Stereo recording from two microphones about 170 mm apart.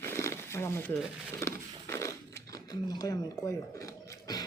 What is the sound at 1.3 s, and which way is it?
Speech, 15° left (ahead or behind).